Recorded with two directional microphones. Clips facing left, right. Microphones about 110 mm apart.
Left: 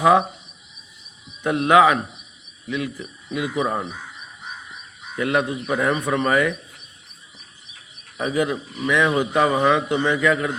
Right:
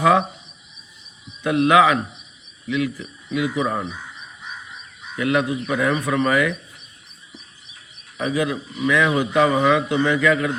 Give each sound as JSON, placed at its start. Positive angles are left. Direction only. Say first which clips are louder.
{"t": 1.5, "sound": "a man's voice", "louder": "even", "side_deg": 25}
{"t": 5.1, "sound": "a man's voice", "louder": "right 1 dB", "side_deg": 30}
{"t": 8.2, "sound": "a man's voice", "louder": "even", "side_deg": 25}